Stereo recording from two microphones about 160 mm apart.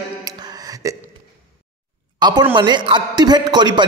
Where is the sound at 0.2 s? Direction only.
25° right (ahead or behind).